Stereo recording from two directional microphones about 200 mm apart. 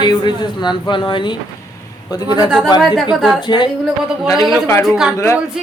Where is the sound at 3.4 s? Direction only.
20° left (ahead or behind).